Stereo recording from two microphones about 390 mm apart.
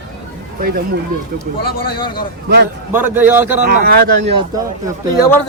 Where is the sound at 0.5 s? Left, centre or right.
Right.